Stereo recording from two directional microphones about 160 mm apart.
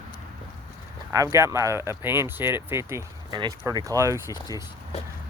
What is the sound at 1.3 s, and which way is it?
Speech, 15° right (ahead or behind).